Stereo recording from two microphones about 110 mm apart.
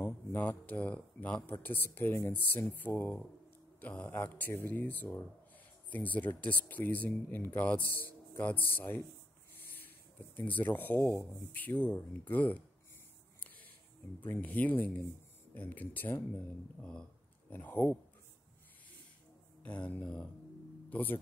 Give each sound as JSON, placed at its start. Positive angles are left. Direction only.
{"t": 0.0, "sound": "speech", "side_deg": 20}
{"t": 9.6, "sound": "a sound", "side_deg": 15}
{"t": 11.5, "sound": "speech", "side_deg": 15}
{"t": 13.4, "sound": "a sound", "side_deg": 15}
{"t": 14.2, "sound": "speech", "side_deg": 15}
{"t": 16.8, "sound": "speech", "side_deg": 10}
{"t": 19.6, "sound": "speech", "side_deg": 10}